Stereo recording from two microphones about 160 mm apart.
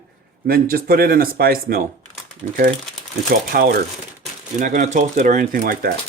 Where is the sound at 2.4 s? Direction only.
60° right (ahead or behind).